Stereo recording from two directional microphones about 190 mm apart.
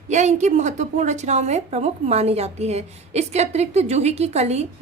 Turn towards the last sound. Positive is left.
turn(degrees=-35)  # may be behind; listen again after turning